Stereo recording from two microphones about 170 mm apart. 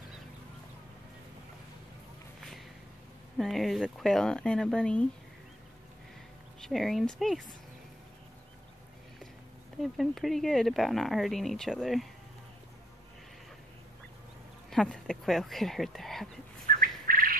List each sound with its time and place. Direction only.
3.3 s speech: centre (ahead or behind)
6.6 s speech: centre (ahead or behind)
9.9 s speech: centre (ahead or behind)
14.7 s speech: 5° left (ahead or behind)
16.8 s bird: 55° right (ahead or behind)